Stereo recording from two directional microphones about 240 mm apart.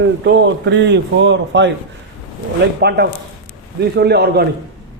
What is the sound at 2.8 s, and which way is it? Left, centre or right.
A man's voice, right.